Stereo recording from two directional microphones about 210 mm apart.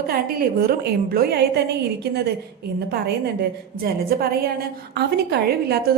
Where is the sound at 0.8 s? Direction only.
50° right (ahead or behind).